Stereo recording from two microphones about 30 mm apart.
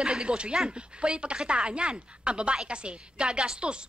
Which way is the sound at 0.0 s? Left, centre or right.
Right.